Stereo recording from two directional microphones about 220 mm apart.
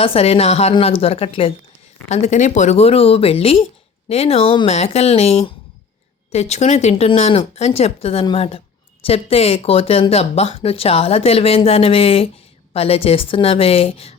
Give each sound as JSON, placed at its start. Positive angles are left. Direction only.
{"t": 0.0, "sound": "speech", "side_deg": 25}